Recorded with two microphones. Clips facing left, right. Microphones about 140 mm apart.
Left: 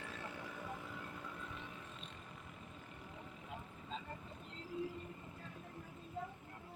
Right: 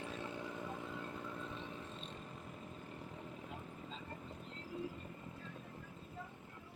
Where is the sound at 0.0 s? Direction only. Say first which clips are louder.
Right 4 dB; 20° right (ahead or behind).